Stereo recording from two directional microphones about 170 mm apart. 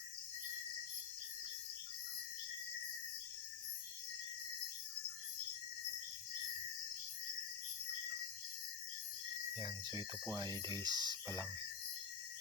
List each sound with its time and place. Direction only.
9.6 s speech: 20° right (ahead or behind)